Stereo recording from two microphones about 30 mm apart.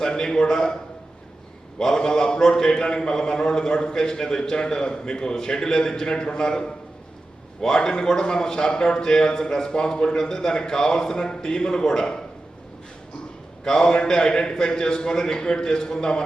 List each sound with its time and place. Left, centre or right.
0.0 s a man's voice: left
2.0 s a man's voice: left
13.7 s a man's voice: left